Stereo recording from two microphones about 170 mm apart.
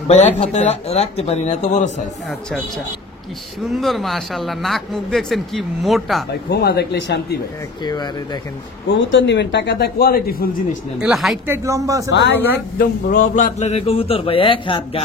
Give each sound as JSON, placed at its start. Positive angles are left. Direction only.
{"t": 0.1, "sound": "speech", "side_deg": 40}
{"t": 3.7, "sound": "speech", "side_deg": 0}
{"t": 6.5, "sound": "a man's voice", "side_deg": 75}
{"t": 7.8, "sound": "speech", "side_deg": 25}
{"t": 8.9, "sound": "a man's voice", "side_deg": 90}
{"t": 11.0, "sound": "speech", "side_deg": 0}
{"t": 11.4, "sound": "speech", "side_deg": -15}
{"t": 12.1, "sound": "speech", "side_deg": 90}
{"t": 12.7, "sound": "a man's voice", "side_deg": 50}